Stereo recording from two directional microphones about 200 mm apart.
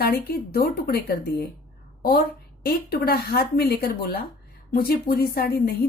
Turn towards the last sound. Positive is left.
turn(degrees=50)  # may be behind; listen again after turning